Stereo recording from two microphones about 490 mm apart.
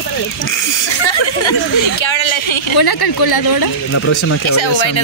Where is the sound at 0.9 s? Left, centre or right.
Left.